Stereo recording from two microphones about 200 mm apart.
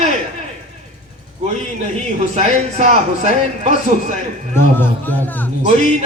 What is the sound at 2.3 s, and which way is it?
A man's voice, 35° right (ahead or behind).